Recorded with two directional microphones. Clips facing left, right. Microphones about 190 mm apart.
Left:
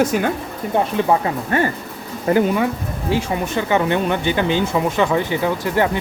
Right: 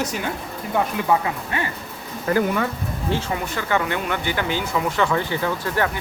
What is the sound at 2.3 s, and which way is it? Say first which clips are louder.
Speech: left 4 dB; 20° left (ahead or behind).